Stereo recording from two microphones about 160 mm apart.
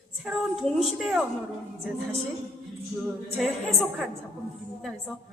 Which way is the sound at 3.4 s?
Centre (ahead or behind).